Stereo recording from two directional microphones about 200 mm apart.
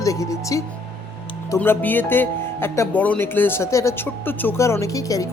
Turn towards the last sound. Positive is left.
turn(degrees=15)  # may be behind; listen again after turning